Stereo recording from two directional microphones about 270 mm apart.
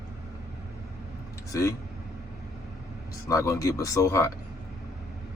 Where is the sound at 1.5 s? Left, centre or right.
Centre.